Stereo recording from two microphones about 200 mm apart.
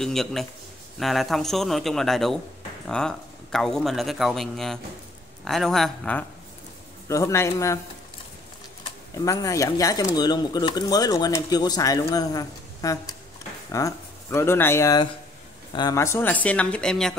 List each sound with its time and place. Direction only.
0.0 s a man's voice: centre (ahead or behind)
7.1 s speech: 15° left (ahead or behind)
9.2 s speech: 15° left (ahead or behind)